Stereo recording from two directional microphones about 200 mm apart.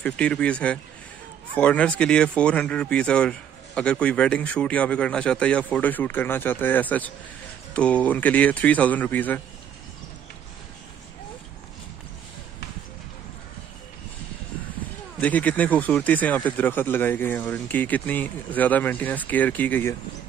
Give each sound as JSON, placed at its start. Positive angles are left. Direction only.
{"t": 0.0, "sound": "speech", "side_deg": 5}
{"t": 15.1, "sound": "speech", "side_deg": 10}